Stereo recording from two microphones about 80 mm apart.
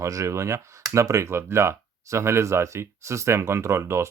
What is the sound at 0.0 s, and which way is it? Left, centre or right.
Speech, right.